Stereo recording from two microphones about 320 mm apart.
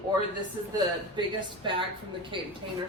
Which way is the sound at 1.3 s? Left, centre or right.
Centre.